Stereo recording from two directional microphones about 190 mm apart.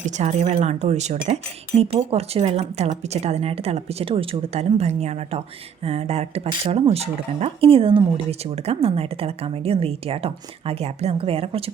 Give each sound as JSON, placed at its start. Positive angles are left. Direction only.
{"t": 0.0, "sound": "speech", "side_deg": -40}